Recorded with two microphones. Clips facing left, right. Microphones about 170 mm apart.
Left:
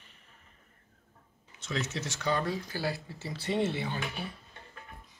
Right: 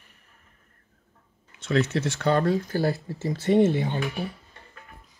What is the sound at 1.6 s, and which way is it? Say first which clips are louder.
Speech: right 11 dB; 60° right (ahead or behind).